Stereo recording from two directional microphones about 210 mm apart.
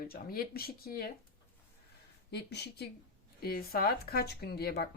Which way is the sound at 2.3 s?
50° left (ahead or behind).